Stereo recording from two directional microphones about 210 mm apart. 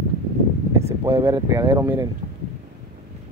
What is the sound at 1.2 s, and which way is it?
Speech, 15° right (ahead or behind).